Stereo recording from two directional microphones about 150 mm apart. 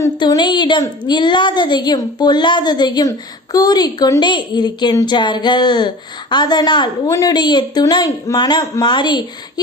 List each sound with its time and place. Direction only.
0.0 s speech: 25° left (ahead or behind)